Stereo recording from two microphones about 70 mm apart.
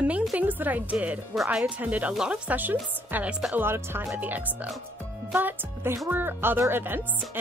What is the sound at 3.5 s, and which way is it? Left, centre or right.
Speech, right.